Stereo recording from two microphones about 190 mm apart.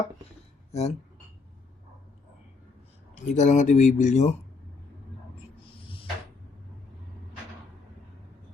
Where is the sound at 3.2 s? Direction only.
40° left (ahead or behind).